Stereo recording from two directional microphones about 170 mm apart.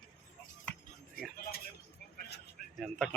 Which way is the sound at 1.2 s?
60° left (ahead or behind).